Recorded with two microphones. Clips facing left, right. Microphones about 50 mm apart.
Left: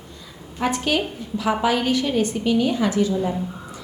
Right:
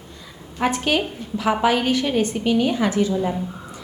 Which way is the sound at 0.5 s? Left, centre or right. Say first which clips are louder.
Right 1 dB; right.